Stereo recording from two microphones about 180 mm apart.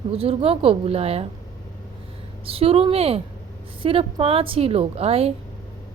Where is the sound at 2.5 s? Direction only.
35° right (ahead or behind).